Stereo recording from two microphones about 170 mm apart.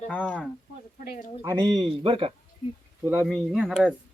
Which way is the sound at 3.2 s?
Centre (ahead or behind).